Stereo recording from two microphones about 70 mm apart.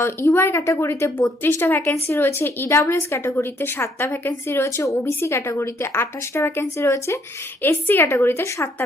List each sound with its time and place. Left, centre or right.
0.0 s speech: left
1.4 s a woman's voice: left
1.8 s speech: left
4.8 s speech: left
7.6 s a woman's voice: left